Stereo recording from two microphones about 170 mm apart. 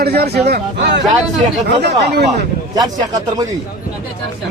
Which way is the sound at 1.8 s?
80° right.